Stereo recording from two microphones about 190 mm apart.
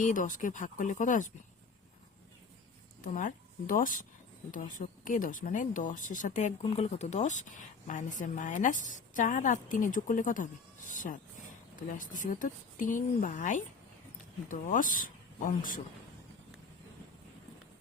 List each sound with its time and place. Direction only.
0.0 s speech: 45° left (ahead or behind)
3.0 s a woman's voice: 45° left (ahead or behind)
6.6 s speech: 30° left (ahead or behind)